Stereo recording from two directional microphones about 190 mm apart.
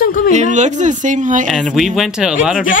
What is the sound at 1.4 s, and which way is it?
Speech, centre (ahead or behind).